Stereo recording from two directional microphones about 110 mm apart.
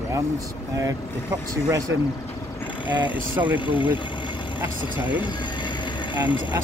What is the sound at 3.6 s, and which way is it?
Music, 45° left (ahead or behind).